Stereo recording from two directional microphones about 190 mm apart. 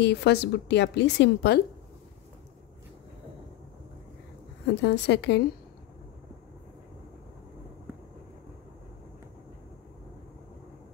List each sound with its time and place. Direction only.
0.0 s a woman's voice: 60° left (ahead or behind)
4.6 s a woman's voice: 65° left (ahead or behind)